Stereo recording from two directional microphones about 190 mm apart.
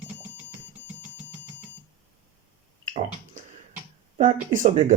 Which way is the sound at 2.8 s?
40° right (ahead or behind).